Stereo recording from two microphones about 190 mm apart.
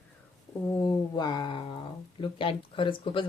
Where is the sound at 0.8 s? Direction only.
20° left (ahead or behind).